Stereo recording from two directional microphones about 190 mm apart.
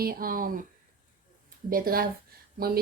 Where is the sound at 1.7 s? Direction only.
50° right (ahead or behind).